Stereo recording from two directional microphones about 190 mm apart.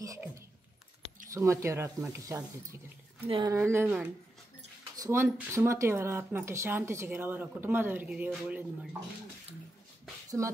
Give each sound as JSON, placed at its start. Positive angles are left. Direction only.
{"t": 0.0, "sound": "typing", "side_deg": -15}
{"t": 1.3, "sound": "speech", "side_deg": -15}
{"t": 3.3, "sound": "speech", "side_deg": -25}
{"t": 3.5, "sound": "speech", "side_deg": -10}
{"t": 10.4, "sound": "speech", "side_deg": -15}